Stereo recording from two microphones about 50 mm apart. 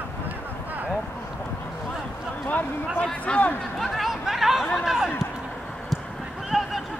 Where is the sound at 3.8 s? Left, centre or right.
Centre.